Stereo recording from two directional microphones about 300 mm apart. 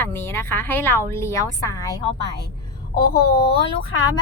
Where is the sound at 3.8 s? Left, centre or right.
Left.